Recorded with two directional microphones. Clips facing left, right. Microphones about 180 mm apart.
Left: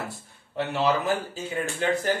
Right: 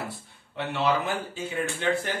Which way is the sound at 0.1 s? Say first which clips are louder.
Left 3 dB; 40° left (ahead or behind).